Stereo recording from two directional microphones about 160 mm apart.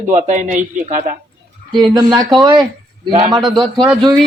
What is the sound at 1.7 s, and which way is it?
Speech, 25° right (ahead or behind).